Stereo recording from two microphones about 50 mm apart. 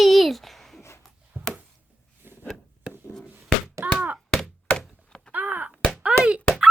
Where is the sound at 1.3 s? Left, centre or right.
Right.